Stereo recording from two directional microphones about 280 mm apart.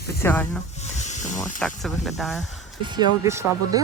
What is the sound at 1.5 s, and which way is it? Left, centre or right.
Speech, centre.